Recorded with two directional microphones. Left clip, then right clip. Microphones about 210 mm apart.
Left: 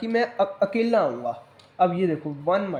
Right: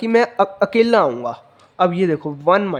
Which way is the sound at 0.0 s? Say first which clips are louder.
Right 7 dB; 30° right (ahead or behind).